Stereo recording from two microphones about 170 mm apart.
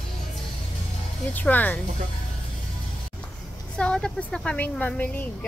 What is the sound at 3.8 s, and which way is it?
A woman's voice, 5° left (ahead or behind).